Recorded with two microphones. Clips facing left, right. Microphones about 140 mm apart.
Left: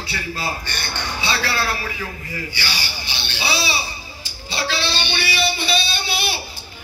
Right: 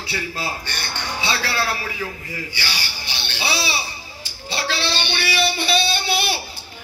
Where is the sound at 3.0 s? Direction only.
55° right (ahead or behind).